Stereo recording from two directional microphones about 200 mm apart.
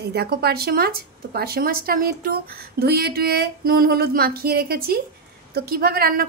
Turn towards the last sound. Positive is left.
turn(degrees=-50)  # may be behind; listen again after turning